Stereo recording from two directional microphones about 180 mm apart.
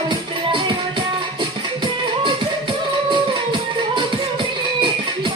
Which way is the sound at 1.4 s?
25° right (ahead or behind).